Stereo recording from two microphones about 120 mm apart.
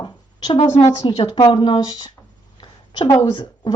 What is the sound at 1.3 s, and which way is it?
Speech, 35° left (ahead or behind).